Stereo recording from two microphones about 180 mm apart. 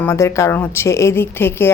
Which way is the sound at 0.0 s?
15° left (ahead or behind).